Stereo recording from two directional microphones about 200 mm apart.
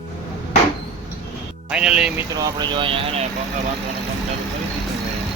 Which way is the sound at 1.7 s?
5° right (ahead or behind).